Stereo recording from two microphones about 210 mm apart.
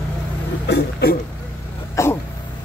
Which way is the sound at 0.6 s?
50° left (ahead or behind).